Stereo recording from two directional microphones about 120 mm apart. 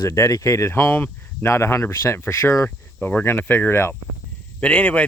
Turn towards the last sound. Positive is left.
turn(degrees=10)  # may be behind; listen again after turning